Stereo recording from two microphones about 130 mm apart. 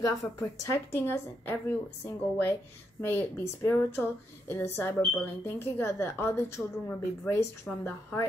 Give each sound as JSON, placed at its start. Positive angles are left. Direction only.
{"t": 0.0, "sound": "speech", "side_deg": 25}